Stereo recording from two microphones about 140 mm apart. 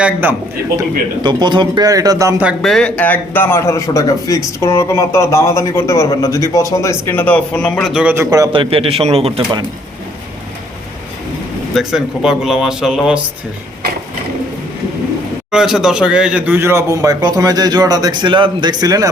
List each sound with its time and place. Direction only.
0.0 s a man's voice: 15° right (ahead or behind)
1.2 s speech: 30° right (ahead or behind)
2.4 s a man's voice: centre (ahead or behind)
8.1 s speech: 20° right (ahead or behind)
8.5 s a man's voice: 40° right (ahead or behind)
11.7 s speech: 5° right (ahead or behind)
15.5 s speech: 5° right (ahead or behind); by 19.0 s 25° right (ahead or behind)